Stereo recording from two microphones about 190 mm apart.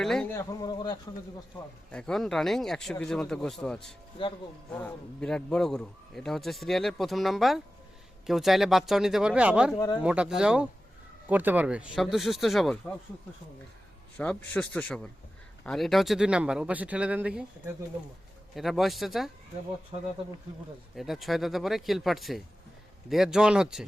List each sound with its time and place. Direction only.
0.0 s a sound: 5° left (ahead or behind)
0.3 s speech: 20° left (ahead or behind)
1.9 s a man's voice: 5° left (ahead or behind)
9.7 s speech: 20° left (ahead or behind)
10.0 s a man's voice: 5° right (ahead or behind)
14.2 s a man's voice: 5° left (ahead or behind)
18.5 s a man's voice: centre (ahead or behind)
19.9 s speech: 25° right (ahead or behind)
20.9 s a man's voice: centre (ahead or behind)